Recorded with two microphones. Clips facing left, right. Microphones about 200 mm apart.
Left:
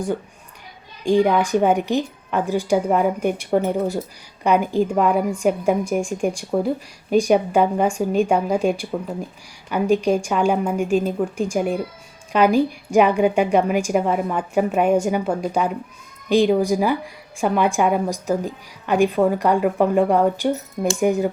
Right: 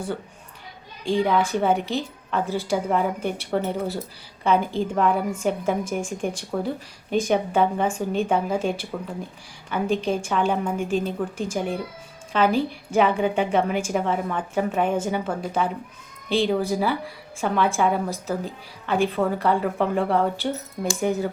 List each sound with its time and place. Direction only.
1.0 s a woman's voice: 15° left (ahead or behind)